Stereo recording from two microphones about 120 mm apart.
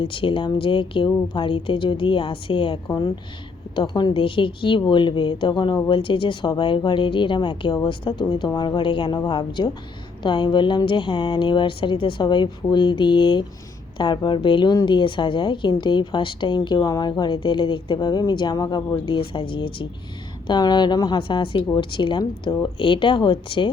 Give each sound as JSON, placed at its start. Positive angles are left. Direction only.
{"t": 0.0, "sound": "a woman's voice", "side_deg": 45}
{"t": 3.8, "sound": "a woman's voice", "side_deg": 40}